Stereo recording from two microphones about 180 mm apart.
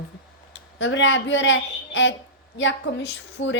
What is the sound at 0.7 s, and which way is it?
A woman's voice, 90° left.